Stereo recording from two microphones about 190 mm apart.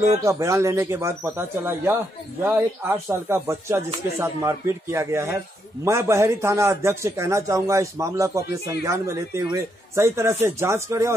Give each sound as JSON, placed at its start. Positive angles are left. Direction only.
{"t": 0.2, "sound": "speech", "side_deg": -15}